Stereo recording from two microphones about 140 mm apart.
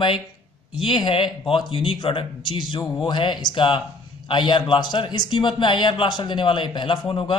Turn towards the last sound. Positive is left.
turn(degrees=35)  # may be behind; listen again after turning